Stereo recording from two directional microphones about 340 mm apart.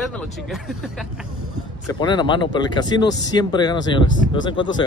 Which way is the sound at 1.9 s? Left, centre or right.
Centre.